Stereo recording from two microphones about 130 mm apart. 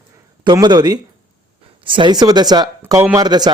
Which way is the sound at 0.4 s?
30° right (ahead or behind).